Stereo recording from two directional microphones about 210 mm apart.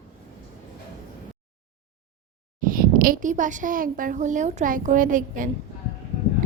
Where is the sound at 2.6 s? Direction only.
40° right (ahead or behind).